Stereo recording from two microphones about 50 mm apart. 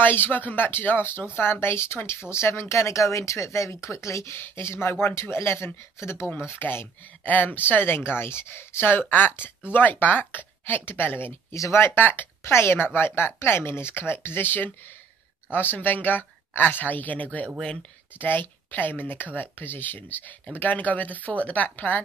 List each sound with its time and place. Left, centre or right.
0.0 s speech: left
4.6 s speech: left
6.5 s speech: left
7.2 s speech: left
11.5 s speech: left
11.8 s speech: left
12.4 s speech: left
12.7 s speech: left